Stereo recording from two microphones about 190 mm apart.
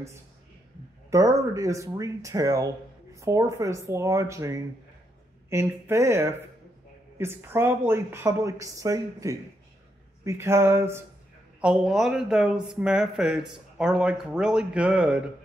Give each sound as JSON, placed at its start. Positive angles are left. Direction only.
{"t": 1.1, "sound": "a woman's voice", "side_deg": -15}